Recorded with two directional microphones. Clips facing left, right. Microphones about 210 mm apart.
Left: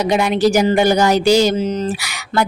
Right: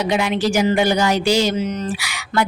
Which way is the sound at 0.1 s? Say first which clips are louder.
Left 6 dB; 40° left (ahead or behind).